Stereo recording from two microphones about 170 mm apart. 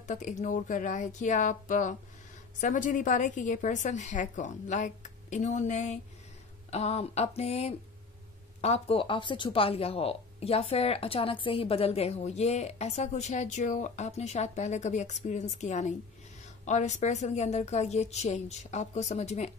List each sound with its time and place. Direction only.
0.0 s a woman's voice: 45° left (ahead or behind)